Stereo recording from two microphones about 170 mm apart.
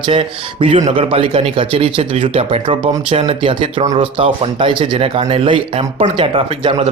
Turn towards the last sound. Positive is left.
turn(degrees=-35)  # may be behind; listen again after turning